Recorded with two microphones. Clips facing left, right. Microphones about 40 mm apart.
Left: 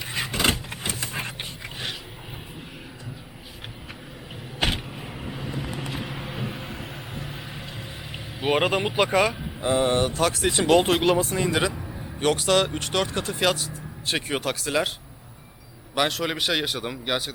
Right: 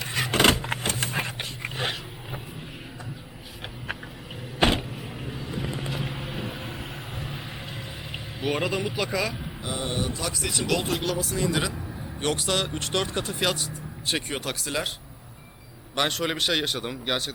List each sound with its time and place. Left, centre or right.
0.0 s vehicle: centre
0.3 s vehicle: right
0.9 s a sound: right
4.9 s vehicle: left
6.0 s vehicle: centre
8.4 s speech: left
11.0 s speech: left
11.5 s speech: centre
16.0 s speech: centre